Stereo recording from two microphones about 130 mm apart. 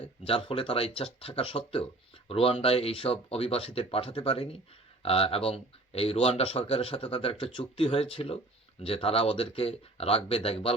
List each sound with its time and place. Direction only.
0.3 s speech: 45° left (ahead or behind)